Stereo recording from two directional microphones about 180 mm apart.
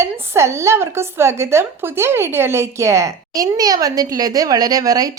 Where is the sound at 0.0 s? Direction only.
15° right (ahead or behind).